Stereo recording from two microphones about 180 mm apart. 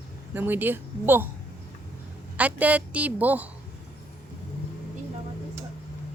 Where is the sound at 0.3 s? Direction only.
10° right (ahead or behind).